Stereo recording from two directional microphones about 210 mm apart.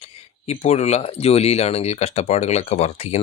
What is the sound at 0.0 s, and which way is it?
Speech, 30° left (ahead or behind).